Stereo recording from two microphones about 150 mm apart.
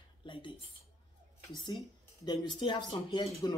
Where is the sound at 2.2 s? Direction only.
30° left (ahead or behind).